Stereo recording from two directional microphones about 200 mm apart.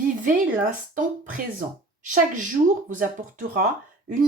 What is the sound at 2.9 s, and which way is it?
Speech, 40° right (ahead or behind).